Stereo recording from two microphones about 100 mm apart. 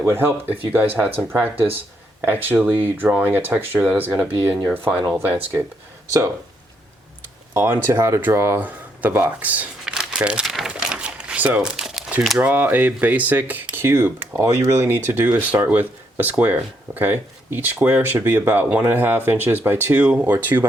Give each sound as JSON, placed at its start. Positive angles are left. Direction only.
{"t": 0.0, "sound": "speech", "side_deg": -25}
{"t": 4.9, "sound": "speech", "side_deg": -10}
{"t": 7.5, "sound": "speech", "side_deg": -30}
{"t": 10.4, "sound": "crumpling", "side_deg": 0}
{"t": 10.7, "sound": "typewriter", "side_deg": -10}
{"t": 11.8, "sound": "crumpling", "side_deg": -5}
{"t": 12.4, "sound": "speech", "side_deg": -15}